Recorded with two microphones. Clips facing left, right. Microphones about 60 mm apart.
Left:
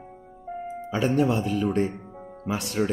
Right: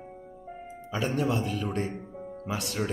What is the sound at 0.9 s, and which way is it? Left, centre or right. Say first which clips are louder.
Speech: left 5 dB; left.